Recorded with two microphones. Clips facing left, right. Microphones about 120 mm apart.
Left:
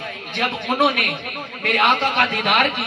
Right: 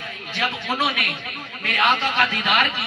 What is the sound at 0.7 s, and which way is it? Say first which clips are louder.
A man's voice: left 6 dB; 55° left (ahead or behind).